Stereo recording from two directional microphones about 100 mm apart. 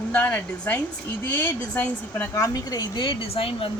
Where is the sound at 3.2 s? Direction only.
75° left (ahead or behind).